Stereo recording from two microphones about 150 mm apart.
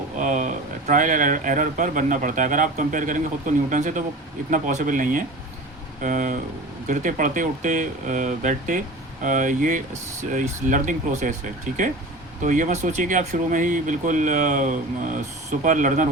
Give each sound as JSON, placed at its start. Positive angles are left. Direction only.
{"t": 0.2, "sound": "speech", "side_deg": -55}
{"t": 12.4, "sound": "speech", "side_deg": -55}